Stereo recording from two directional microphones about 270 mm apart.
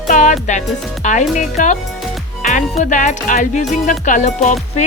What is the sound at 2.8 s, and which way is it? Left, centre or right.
Speech, left.